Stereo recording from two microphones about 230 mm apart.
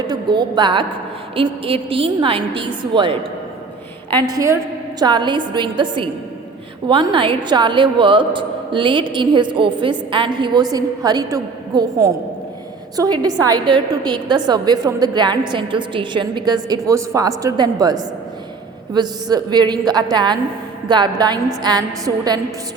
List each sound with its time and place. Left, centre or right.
0.1 s a woman's voice: centre
4.2 s a woman's voice: centre